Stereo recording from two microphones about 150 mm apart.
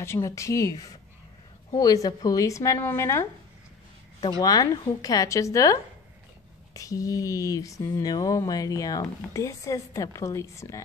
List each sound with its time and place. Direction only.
0.0 s speech: 20° left (ahead or behind)